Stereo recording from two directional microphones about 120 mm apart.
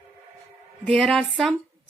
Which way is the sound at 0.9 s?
5° left (ahead or behind).